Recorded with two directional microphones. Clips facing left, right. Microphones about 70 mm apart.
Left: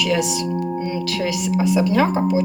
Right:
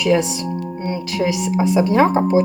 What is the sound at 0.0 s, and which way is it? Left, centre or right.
Speech, right.